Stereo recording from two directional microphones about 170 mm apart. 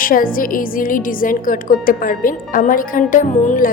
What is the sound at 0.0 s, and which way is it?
A woman's voice, 55° left (ahead or behind).